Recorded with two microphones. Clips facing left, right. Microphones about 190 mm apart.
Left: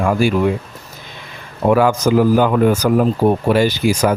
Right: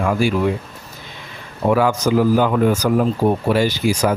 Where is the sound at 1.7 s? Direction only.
55° left (ahead or behind).